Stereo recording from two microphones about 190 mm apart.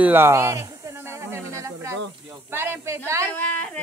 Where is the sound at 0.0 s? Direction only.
10° right (ahead or behind).